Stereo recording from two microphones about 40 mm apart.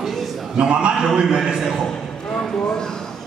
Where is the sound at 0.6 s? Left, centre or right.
Right.